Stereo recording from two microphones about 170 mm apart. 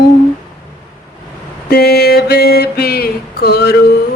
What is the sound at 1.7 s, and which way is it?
Mantra, 70° left (ahead or behind).